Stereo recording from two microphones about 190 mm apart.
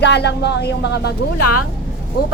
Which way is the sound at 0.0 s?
65° left (ahead or behind).